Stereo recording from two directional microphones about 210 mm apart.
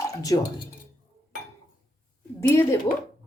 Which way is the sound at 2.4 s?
10° left (ahead or behind).